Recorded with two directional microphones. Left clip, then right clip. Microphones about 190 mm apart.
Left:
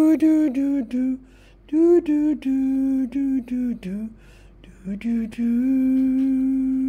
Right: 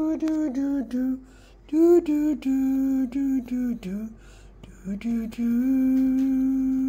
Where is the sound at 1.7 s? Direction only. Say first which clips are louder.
Left 2 dB; 15° left (ahead or behind).